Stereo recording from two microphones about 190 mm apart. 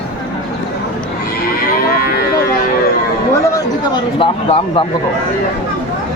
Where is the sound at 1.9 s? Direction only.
50° left (ahead or behind).